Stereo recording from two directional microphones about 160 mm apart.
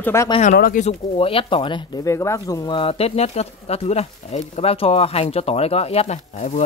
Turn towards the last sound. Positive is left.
turn(degrees=45)  # may be behind; listen again after turning